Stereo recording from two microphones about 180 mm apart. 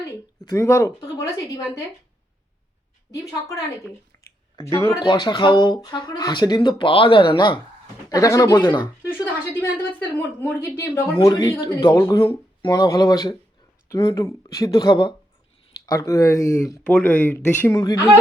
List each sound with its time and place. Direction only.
0.4 s a woman's voice: 15° left (ahead or behind)
4.1 s a sound: 15° left (ahead or behind)
4.8 s a woman's voice: 15° left (ahead or behind)
5.0 s speech: 25° left (ahead or behind)
9.0 s a woman's voice: 15° left (ahead or behind)